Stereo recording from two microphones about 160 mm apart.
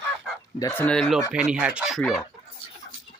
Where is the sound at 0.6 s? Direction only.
20° left (ahead or behind).